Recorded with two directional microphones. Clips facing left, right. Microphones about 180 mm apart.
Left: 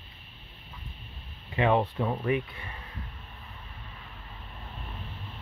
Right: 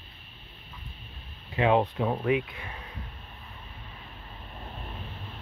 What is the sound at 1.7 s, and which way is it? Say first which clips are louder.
Speech: right 3 dB; 10° right (ahead or behind).